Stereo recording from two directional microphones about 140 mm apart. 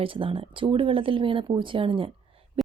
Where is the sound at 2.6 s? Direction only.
40° right (ahead or behind).